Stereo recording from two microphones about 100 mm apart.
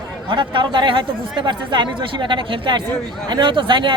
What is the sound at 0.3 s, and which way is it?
Speech, 55° right (ahead or behind).